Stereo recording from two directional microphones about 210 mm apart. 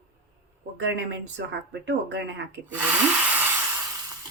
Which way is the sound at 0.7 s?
55° right (ahead or behind).